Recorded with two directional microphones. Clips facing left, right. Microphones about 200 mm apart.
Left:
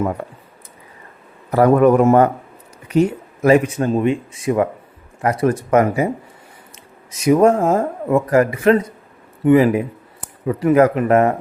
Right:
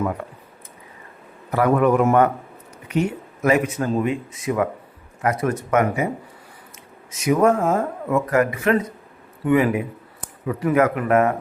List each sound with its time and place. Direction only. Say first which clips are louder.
1.5 s speech: left 5 dB; 40° left (ahead or behind)
7.2 s speech: left 4 dB; 30° left (ahead or behind)